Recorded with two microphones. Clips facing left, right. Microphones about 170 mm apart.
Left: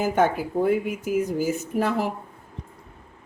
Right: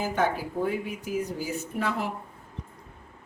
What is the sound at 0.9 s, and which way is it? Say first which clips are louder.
Speech: left 6 dB; 45° left (ahead or behind).